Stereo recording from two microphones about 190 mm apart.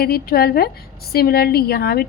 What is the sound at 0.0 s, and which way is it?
A woman's voice, 55° left (ahead or behind).